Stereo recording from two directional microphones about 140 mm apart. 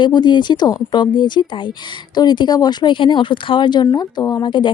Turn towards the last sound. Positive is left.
turn(degrees=35)  # may be behind; listen again after turning